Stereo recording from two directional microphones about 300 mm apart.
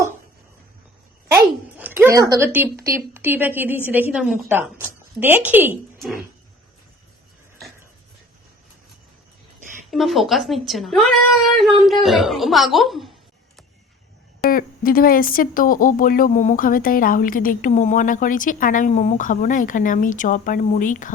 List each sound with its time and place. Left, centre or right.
1.8 s a woman's voice: centre
9.8 s a woman's voice: centre
14.4 s speech: left